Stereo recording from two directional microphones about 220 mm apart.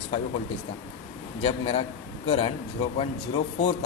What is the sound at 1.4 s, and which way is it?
A man's voice, 25° left (ahead or behind).